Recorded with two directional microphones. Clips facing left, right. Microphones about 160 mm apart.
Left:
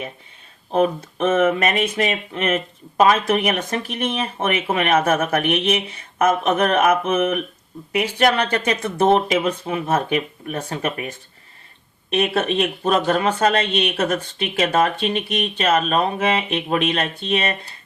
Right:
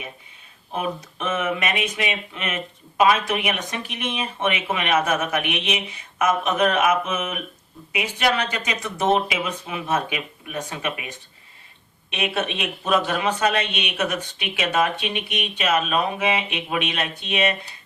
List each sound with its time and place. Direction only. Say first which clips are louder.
0.7 s speech: left 9 dB; 50° left (ahead or behind)
9.3 s speech: left 7 dB; 40° left (ahead or behind)
12.1 s speech: left 7 dB; 50° left (ahead or behind)
14.2 s speech: left 6 dB; 35° left (ahead or behind)
15.4 s speech: left 2 dB; 50° left (ahead or behind)